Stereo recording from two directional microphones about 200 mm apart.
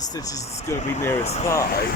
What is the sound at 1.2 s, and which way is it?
Speech, 30° left (ahead or behind).